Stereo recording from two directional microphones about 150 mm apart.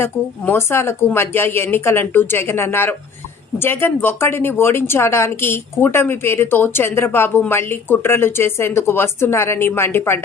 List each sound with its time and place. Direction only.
0.0 s speech: 15° left (ahead or behind)